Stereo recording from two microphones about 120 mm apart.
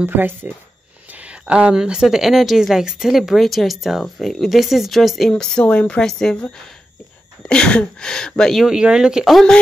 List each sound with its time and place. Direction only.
0.0 s speech: 15° right (ahead or behind)
1.1 s a sound: 10° right (ahead or behind)
1.4 s a woman's voice: 5° right (ahead or behind)